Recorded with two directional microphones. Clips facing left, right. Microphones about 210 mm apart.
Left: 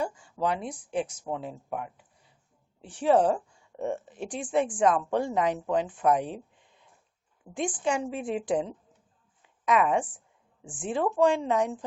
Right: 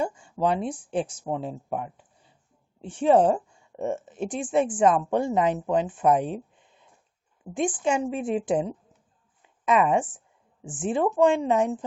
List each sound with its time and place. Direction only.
0.0 s a woman's voice: 25° right (ahead or behind)